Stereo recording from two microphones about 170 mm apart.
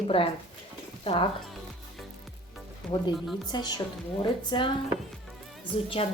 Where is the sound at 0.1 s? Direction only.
35° left (ahead or behind).